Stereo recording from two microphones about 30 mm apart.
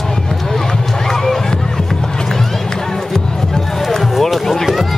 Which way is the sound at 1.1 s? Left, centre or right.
Centre.